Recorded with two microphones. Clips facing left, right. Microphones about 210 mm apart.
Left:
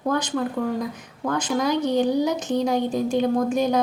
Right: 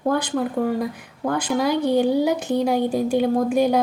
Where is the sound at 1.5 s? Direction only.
10° right (ahead or behind).